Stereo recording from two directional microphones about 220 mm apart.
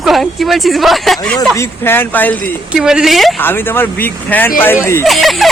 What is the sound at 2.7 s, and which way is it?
Speech, 5° right (ahead or behind).